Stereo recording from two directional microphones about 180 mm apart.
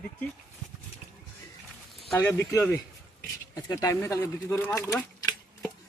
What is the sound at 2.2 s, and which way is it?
Speech, 15° left (ahead or behind).